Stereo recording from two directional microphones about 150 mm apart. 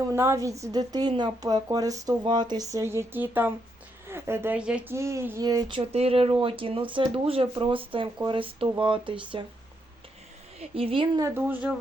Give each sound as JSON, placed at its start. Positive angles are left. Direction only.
{"t": 0.1, "sound": "a woman's voice", "side_deg": -20}
{"t": 4.9, "sound": "a woman's voice", "side_deg": -20}
{"t": 10.6, "sound": "speech", "side_deg": -40}
{"t": 11.2, "sound": "speech", "side_deg": -15}